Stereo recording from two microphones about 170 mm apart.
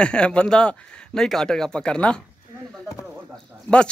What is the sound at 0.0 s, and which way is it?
Speech, 5° left (ahead or behind).